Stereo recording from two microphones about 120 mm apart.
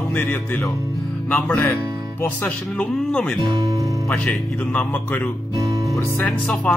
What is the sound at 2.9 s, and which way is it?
Speech, 5° left (ahead or behind).